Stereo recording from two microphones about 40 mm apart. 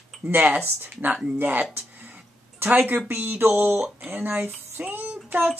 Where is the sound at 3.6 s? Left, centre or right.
Right.